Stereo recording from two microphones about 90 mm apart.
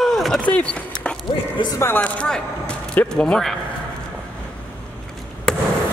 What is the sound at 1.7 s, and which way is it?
Speech, 25° left (ahead or behind).